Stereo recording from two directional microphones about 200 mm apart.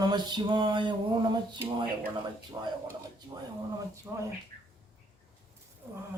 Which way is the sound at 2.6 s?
15° right (ahead or behind).